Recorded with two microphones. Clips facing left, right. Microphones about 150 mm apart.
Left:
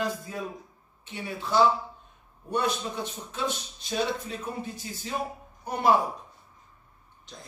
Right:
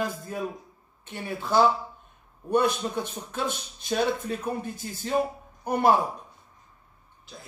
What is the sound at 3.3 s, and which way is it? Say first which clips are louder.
Speech: right 1 dB; 55° right (ahead or behind).